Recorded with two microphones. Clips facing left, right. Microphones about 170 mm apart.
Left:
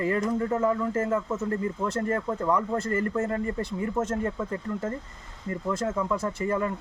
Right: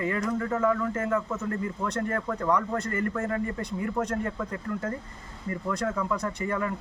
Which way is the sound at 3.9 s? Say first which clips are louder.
Left 1 dB; 5° left (ahead or behind).